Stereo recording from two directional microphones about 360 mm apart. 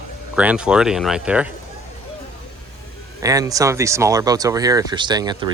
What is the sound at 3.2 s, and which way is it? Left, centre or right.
Speech, centre.